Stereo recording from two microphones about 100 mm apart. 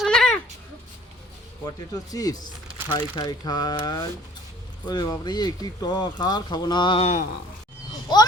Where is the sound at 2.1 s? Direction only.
40° left (ahead or behind).